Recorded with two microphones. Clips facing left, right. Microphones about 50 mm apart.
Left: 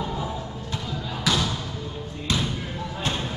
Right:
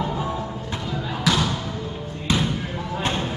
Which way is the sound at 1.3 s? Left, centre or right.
Centre.